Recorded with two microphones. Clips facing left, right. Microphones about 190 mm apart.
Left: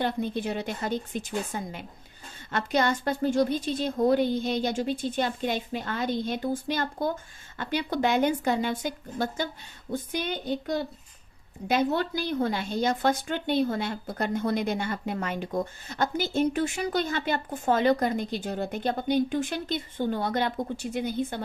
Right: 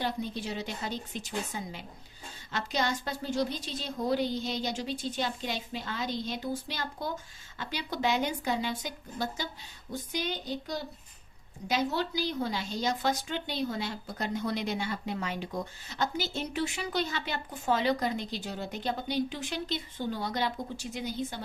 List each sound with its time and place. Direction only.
0.0 s a woman's voice: 55° left (ahead or behind)